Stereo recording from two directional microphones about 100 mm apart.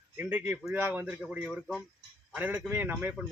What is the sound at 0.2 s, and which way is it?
Speech, 15° right (ahead or behind).